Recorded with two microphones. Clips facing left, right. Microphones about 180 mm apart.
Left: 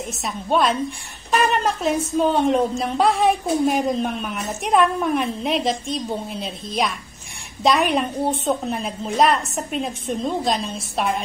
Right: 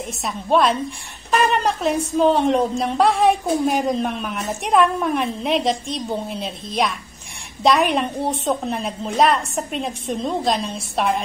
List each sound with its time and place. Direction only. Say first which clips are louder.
0.0 s a woman's voice: right 1 dB; centre (ahead or behind)